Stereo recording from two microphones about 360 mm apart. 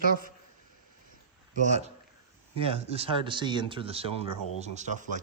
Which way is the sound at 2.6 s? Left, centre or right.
Centre.